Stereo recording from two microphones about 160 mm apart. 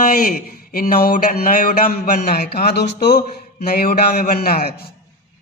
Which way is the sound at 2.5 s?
80° left.